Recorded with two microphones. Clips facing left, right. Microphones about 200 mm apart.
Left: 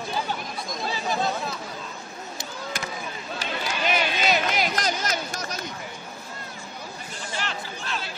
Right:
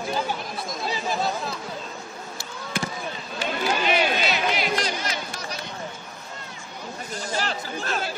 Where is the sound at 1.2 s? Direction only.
Centre (ahead or behind).